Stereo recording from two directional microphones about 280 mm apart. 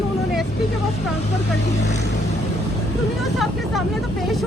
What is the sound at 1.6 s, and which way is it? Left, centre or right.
Speech, left.